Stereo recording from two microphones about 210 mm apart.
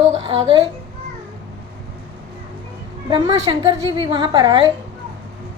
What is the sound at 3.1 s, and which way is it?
A woman's voice, 25° right (ahead or behind).